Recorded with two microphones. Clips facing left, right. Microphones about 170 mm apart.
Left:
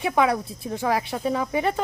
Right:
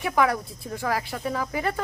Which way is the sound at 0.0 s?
25° left (ahead or behind).